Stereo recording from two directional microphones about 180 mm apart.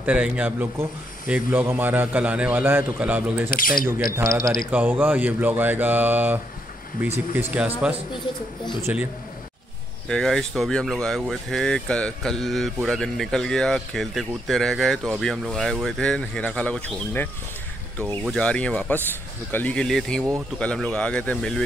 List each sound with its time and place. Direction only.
0.0 s speech: 5° right (ahead or behind)
3.4 s speech: 50° left (ahead or behind)
4.5 s speech: 5° right (ahead or behind)
10.0 s speech: 5° left (ahead or behind)